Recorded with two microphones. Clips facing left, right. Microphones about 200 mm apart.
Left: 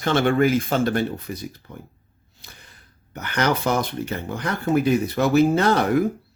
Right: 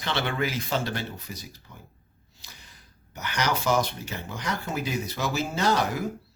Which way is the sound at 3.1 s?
55° left (ahead or behind).